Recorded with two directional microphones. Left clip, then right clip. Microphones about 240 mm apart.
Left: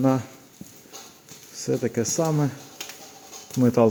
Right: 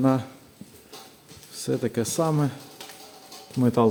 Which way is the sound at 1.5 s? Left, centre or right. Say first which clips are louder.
Left 1 dB; centre.